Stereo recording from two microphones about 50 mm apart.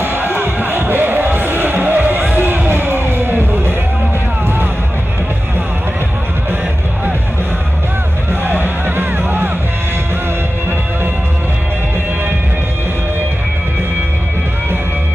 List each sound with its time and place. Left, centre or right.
0.0 s music: right
8.3 s music: right